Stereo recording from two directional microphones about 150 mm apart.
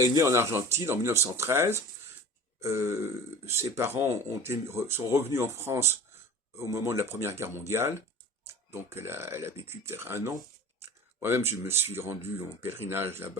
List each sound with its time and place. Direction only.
0.0 s speech: 20° right (ahead or behind)